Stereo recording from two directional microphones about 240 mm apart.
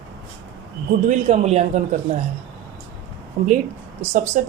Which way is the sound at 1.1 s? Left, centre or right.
Right.